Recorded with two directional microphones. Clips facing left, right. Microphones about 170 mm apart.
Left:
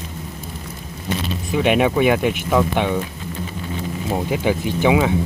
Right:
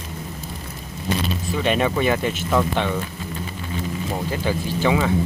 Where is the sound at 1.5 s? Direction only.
15° left (ahead or behind).